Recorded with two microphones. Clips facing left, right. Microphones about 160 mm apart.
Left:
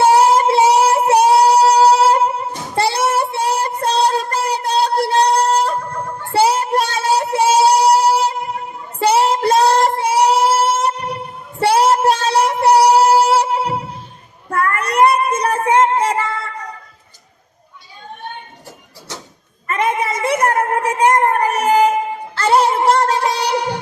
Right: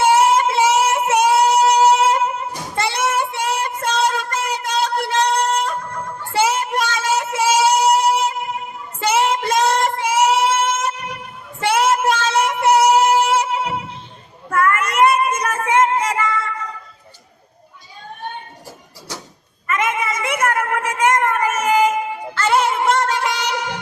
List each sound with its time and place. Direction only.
0.0 s female singing: 35° left (ahead or behind)
14.5 s child singing: 35° left (ahead or behind)
19.6 s a sound: 35° left (ahead or behind)
22.4 s music: 35° left (ahead or behind)